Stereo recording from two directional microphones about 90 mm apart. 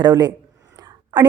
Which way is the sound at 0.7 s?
45° right (ahead or behind).